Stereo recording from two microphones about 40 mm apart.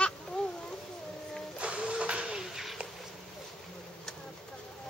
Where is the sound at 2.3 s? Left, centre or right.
Centre.